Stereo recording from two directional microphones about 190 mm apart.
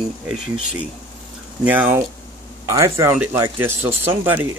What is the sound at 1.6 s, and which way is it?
Speech, 10° right (ahead or behind).